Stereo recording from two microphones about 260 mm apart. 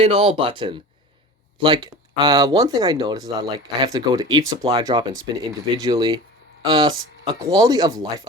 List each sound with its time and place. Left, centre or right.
0.0 s speech: right